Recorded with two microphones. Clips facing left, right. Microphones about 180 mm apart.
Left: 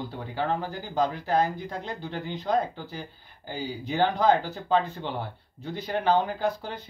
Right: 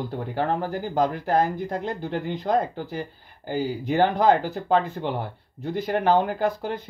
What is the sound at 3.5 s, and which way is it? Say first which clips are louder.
Speech: right 5 dB; 50° right (ahead or behind).